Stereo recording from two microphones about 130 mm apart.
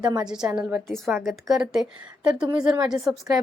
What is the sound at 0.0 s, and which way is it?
Speech, 30° right (ahead or behind).